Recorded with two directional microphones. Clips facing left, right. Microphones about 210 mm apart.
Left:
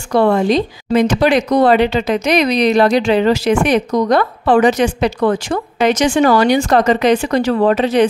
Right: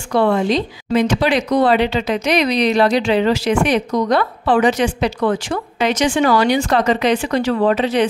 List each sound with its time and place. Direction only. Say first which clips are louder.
0.1 s speech: left 3 dB; 45° left (ahead or behind)